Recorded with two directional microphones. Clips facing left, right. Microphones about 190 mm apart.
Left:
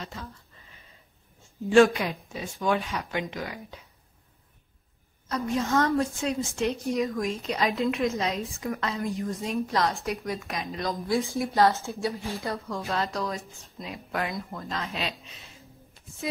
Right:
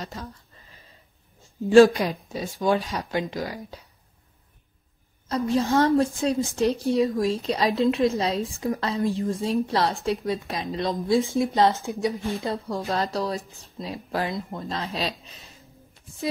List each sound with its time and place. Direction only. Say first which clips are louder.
0.0 s a sound: right 3 dB; 40° right (ahead or behind)
1.7 s a woman's voice: right 4 dB; 35° right (ahead or behind)
5.3 s a woman's voice: right 4 dB; 30° right (ahead or behind)
12.5 s a woman's voice: right 3 dB; 35° right (ahead or behind)